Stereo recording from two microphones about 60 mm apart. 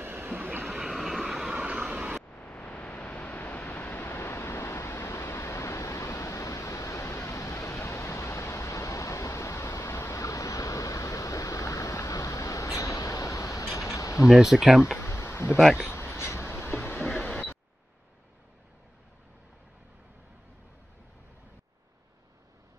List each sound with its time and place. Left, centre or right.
0.0 s vehicle: right
0.7 s vehicle: centre
1.7 s vehicle: centre
2.3 s a sound: left
14.2 s speech: centre
15.0 s a sound: left
17.2 s vehicle: left